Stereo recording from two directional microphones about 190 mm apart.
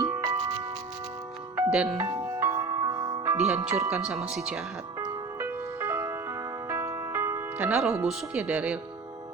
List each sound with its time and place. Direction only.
0.2 s music: 20° right (ahead or behind)
1.7 s speech: centre (ahead or behind)
2.0 s music: 15° right (ahead or behind)
3.3 s speech: 5° right (ahead or behind)
4.9 s music: 15° right (ahead or behind)